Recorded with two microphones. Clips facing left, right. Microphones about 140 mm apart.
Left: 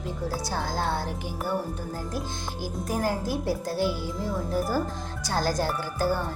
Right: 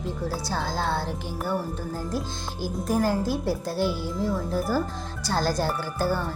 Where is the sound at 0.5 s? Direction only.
15° left (ahead or behind).